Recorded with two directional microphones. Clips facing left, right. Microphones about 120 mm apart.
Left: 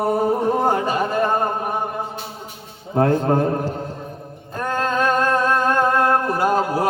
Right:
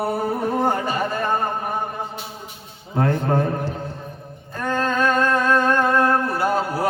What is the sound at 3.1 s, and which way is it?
Speech, 25° left (ahead or behind).